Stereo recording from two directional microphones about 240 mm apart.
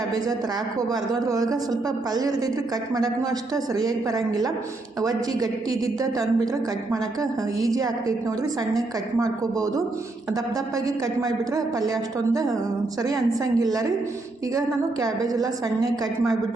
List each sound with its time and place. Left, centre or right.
0.9 s speech: centre
3.5 s speech: centre
9.2 s speech: centre
10.8 s speech: centre
15.0 s speech: centre